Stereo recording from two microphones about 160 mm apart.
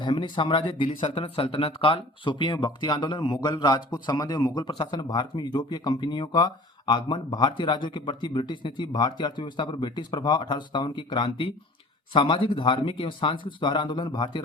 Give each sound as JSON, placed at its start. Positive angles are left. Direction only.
{"t": 0.0, "sound": "speech", "side_deg": 30}